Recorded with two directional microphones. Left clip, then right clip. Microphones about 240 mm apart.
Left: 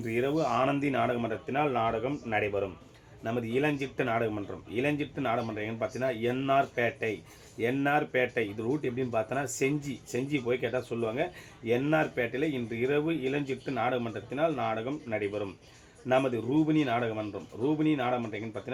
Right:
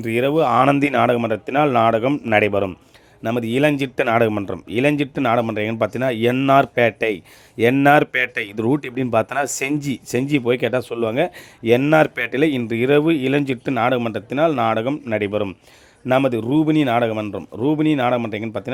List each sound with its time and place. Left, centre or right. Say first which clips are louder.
0.0 s speech: right 11 dB; right